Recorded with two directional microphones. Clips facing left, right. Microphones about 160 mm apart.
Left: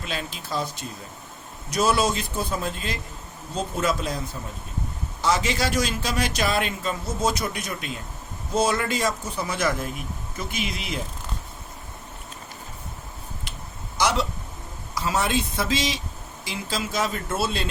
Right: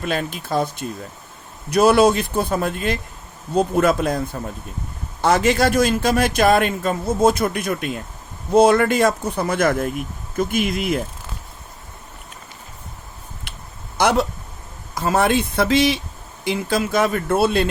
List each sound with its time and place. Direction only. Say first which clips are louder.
0.0 s a man's voice: right 8 dB; 55° right (ahead or behind)
5.2 s a man's voice: right 7 dB; 55° right (ahead or behind)
13.5 s a sound: even; 60° right (ahead or behind)
14.0 s a man's voice: right 6 dB; 55° right (ahead or behind)